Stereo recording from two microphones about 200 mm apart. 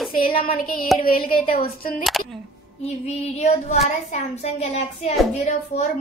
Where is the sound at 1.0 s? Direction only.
45° left (ahead or behind).